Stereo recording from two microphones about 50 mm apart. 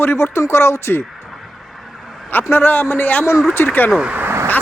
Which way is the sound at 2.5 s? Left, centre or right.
Left.